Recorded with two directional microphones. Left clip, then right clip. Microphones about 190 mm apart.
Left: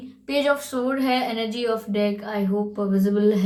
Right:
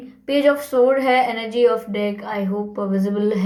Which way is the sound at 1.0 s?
35° right (ahead or behind).